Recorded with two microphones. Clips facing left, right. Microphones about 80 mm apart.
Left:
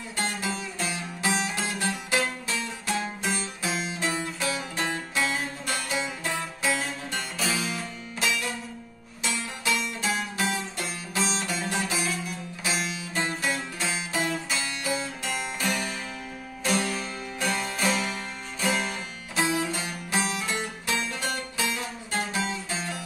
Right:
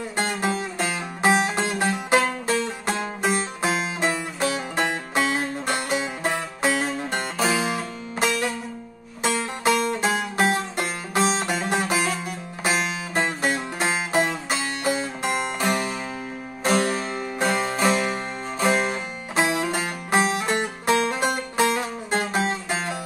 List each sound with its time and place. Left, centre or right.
0.1 s music: right